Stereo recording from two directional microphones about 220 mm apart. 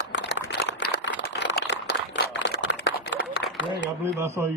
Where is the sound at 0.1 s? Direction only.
55° left (ahead or behind).